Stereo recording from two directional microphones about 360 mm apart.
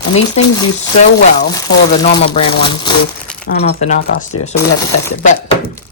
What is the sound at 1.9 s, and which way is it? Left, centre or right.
Speech, centre.